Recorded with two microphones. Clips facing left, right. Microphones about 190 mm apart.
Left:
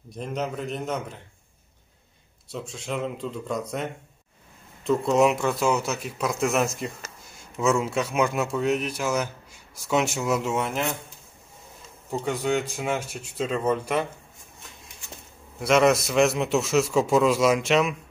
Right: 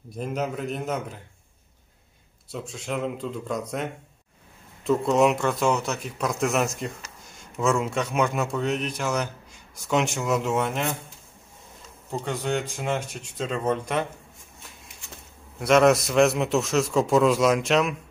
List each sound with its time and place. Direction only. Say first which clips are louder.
0.1 s a man's voice: right 1 dB; 5° right (ahead or behind)
2.5 s a man's voice: even; centre (ahead or behind)
12.1 s speech: left 2 dB; 10° left (ahead or behind)
15.6 s a man's voice: right 1 dB; centre (ahead or behind)